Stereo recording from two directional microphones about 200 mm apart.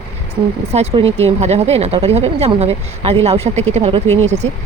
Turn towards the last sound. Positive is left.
turn(degrees=-35)  # may be behind; listen again after turning